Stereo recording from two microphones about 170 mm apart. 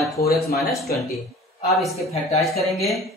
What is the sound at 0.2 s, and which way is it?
Speech, 65° left (ahead or behind).